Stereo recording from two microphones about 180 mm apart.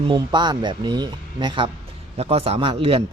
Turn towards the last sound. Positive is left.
turn(degrees=-30)  # may be behind; listen again after turning